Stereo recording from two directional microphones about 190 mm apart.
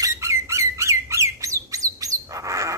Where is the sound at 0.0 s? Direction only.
15° right (ahead or behind).